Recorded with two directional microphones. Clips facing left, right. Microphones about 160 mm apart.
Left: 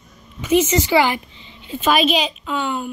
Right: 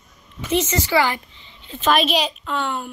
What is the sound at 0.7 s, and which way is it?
A woman's voice, 15° left (ahead or behind).